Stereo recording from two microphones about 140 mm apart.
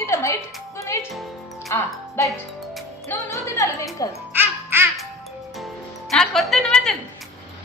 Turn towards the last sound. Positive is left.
turn(degrees=5)  # may be behind; listen again after turning